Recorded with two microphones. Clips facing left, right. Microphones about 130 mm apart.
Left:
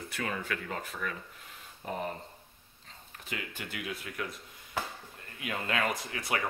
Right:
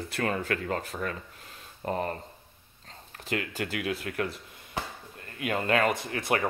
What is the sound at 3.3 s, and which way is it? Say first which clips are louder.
Speech: right 9 dB; 85° right.